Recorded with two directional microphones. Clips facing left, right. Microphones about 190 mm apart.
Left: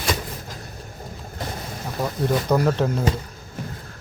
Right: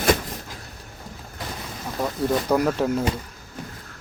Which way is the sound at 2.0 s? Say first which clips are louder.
Even; 5° right (ahead or behind).